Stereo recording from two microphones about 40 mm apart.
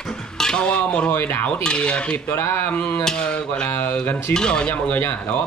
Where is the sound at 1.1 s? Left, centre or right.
Left.